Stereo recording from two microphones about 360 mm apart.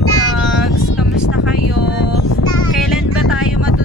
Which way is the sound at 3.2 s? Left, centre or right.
Left.